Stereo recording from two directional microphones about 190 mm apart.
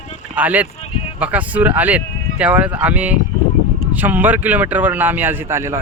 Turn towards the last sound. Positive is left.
turn(degrees=-15)  # may be behind; listen again after turning